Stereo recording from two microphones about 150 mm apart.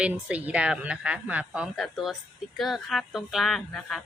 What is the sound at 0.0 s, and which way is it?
Speech, 10° right (ahead or behind).